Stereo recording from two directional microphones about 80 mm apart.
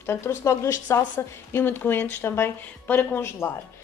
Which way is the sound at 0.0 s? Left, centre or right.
Left.